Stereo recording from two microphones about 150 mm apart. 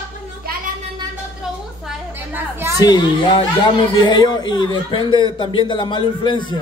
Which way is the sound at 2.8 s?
30° left (ahead or behind).